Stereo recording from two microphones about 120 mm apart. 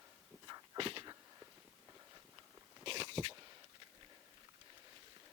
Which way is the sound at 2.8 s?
50° right (ahead or behind).